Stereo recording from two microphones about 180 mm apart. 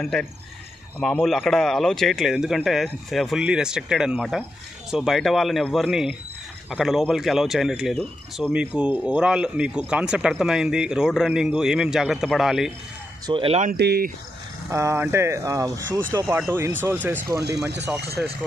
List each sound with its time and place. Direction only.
0.0 s speech: centre (ahead or behind)
13.3 s speech: 30° right (ahead or behind)
13.7 s speech: 60° right (ahead or behind)
14.7 s speech: 15° right (ahead or behind)